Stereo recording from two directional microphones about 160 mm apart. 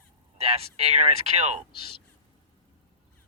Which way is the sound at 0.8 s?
40° right (ahead or behind).